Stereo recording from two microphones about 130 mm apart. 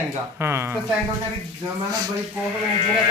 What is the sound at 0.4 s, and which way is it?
Speech, 20° right (ahead or behind).